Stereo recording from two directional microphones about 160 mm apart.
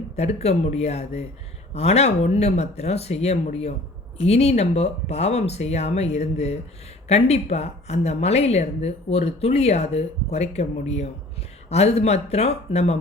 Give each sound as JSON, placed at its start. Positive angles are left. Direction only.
{"t": 0.2, "sound": "a woman's voice", "side_deg": 40}